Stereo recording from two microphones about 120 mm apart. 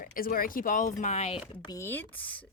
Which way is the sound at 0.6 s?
90° left.